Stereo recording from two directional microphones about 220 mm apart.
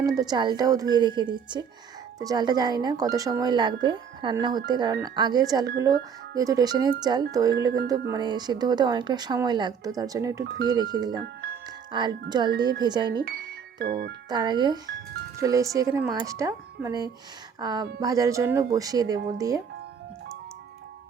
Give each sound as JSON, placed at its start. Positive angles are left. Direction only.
{"t": 0.2, "sound": "a woman's voice", "side_deg": -20}
{"t": 13.7, "sound": "speech", "side_deg": -45}
{"t": 14.3, "sound": "a woman's voice", "side_deg": -20}